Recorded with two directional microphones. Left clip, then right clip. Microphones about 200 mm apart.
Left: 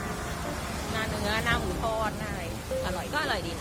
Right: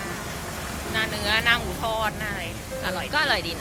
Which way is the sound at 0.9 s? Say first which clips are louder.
Right 7 dB; 15° left (ahead or behind).